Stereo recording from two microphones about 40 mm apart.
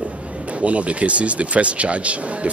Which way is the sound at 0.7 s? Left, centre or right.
Right.